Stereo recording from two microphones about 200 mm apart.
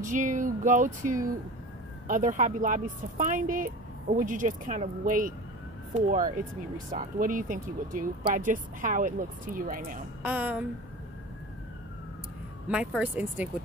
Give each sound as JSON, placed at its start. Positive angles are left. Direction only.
{"t": 0.0, "sound": "speech", "side_deg": -40}
{"t": 10.2, "sound": "speech", "side_deg": -10}
{"t": 12.6, "sound": "speech", "side_deg": -5}